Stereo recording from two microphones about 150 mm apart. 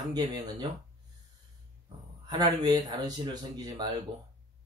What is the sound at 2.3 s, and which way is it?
Speech, 25° right (ahead or behind).